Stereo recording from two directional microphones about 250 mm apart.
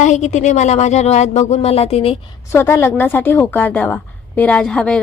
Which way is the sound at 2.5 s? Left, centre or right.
Centre.